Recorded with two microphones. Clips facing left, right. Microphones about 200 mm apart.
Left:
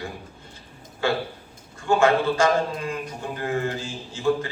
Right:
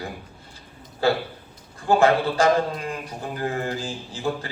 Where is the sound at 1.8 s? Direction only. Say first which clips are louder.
Right 1 dB; 35° right (ahead or behind).